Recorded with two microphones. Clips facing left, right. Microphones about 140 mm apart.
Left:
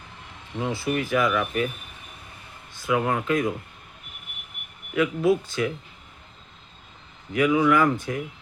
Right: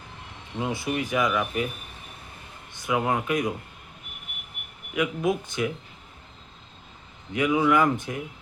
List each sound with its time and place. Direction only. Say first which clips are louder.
0.6 s speech: left 2 dB; 20° right (ahead or behind)
2.7 s speech: left 1 dB; 20° right (ahead or behind)
4.9 s speech: left 4 dB; 20° right (ahead or behind)
7.3 s speech: left 2 dB; 20° right (ahead or behind)